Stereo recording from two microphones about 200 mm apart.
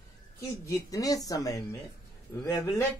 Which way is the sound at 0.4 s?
15° left (ahead or behind).